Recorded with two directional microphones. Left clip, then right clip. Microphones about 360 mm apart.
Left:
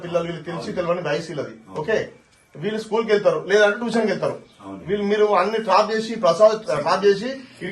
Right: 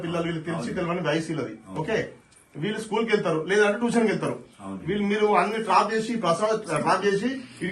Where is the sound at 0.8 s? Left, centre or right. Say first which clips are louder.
Left 5 dB; centre.